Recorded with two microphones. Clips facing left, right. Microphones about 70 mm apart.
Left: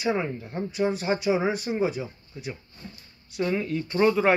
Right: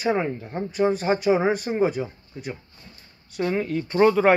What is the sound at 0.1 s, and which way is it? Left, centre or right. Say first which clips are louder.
Speech: right 3 dB; right.